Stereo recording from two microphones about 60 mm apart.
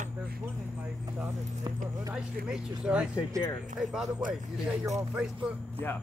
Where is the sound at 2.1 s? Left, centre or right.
Centre.